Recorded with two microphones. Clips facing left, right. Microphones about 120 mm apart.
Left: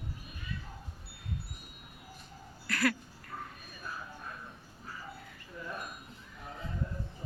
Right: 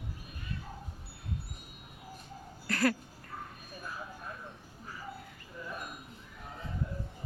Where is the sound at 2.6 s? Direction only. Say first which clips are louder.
Right 2 dB; 40° right (ahead or behind).